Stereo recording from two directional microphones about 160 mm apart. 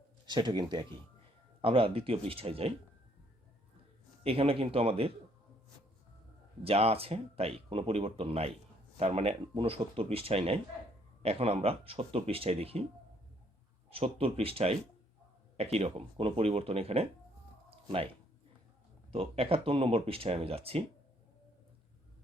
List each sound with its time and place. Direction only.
0.3 s a man's voice: 25° right (ahead or behind)
4.2 s a man's voice: 35° right (ahead or behind)
6.7 s a man's voice: 40° right (ahead or behind)
13.9 s a man's voice: 35° right (ahead or behind)
17.7 s a sound: 35° right (ahead or behind)
19.1 s a man's voice: 40° right (ahead or behind)